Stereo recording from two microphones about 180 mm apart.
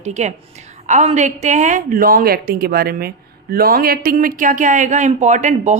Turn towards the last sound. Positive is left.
turn(degrees=-40)  # may be behind; listen again after turning